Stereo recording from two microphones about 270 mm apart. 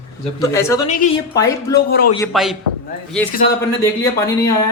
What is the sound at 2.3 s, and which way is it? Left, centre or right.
Speech, centre.